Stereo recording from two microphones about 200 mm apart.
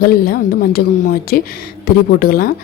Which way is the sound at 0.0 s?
50° left (ahead or behind).